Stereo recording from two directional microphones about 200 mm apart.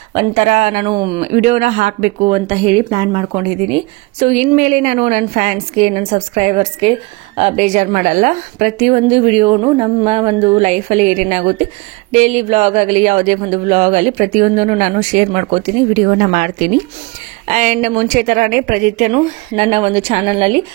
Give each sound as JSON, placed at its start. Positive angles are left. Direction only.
{"t": 0.1, "sound": "speech", "side_deg": -30}
{"t": 0.9, "sound": "speech", "side_deg": -50}
{"t": 1.5, "sound": "speech", "side_deg": -35}